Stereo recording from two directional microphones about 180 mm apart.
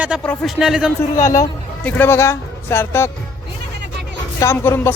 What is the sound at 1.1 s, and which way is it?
Speech, 15° left (ahead or behind).